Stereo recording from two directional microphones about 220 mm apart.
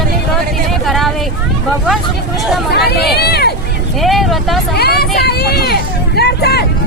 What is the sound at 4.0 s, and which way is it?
Speech, centre (ahead or behind).